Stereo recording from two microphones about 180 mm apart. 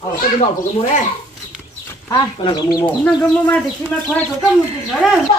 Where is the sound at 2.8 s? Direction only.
5° left (ahead or behind).